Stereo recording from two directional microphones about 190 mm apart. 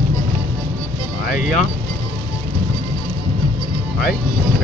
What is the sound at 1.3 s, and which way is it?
Vehicle, 40° left (ahead or behind).